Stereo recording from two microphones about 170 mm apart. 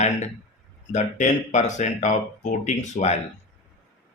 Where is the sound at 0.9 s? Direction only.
45° left (ahead or behind).